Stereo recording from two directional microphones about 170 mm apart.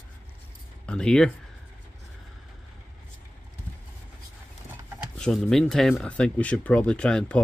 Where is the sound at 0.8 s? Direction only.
5° left (ahead or behind).